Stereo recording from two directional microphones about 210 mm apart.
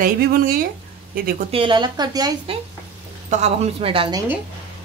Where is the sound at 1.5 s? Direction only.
25° right (ahead or behind).